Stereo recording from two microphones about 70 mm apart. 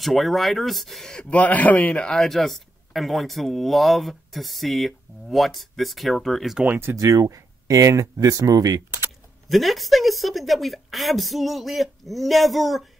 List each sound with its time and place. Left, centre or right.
0.0 s speech: centre
1.1 s a man's voice: left
2.1 s speech: centre
7.0 s speech: right
9.5 s speech: centre